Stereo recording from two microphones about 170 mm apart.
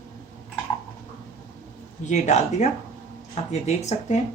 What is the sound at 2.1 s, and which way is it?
Speech, 45° left (ahead or behind).